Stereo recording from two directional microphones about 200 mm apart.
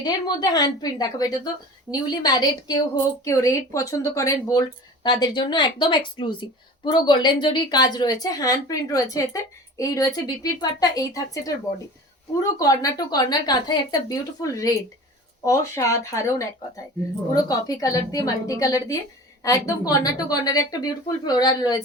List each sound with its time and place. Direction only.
0.0 s a woman's voice: 20° left (ahead or behind)